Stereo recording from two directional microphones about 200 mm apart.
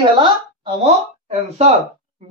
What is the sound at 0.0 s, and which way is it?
Speech, 25° right (ahead or behind).